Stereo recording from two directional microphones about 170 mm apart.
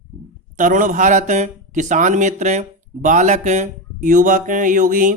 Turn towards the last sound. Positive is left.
turn(degrees=-50)  # may be behind; listen again after turning